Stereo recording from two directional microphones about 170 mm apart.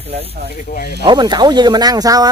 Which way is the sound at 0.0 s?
35° right (ahead or behind).